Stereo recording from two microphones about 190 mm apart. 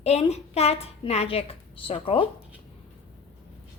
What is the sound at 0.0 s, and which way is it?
A woman's voice, 35° left (ahead or behind).